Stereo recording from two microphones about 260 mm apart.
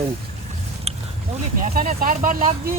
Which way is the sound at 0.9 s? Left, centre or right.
Right.